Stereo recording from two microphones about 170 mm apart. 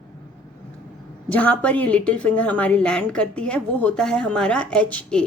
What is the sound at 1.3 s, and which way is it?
A woman's voice, 10° left (ahead or behind).